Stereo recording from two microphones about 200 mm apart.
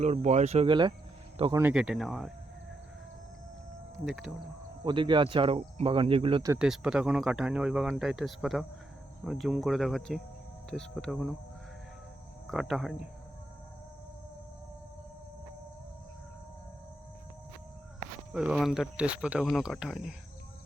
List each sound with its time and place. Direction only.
0.0 s speech: 35° right (ahead or behind)
1.5 s speech: 5° right (ahead or behind)
3.9 s speech: centre (ahead or behind)
4.8 s speech: 25° right (ahead or behind)
6.5 s speech: 5° right (ahead or behind)
12.5 s speech: centre (ahead or behind)
18.3 s speech: centre (ahead or behind)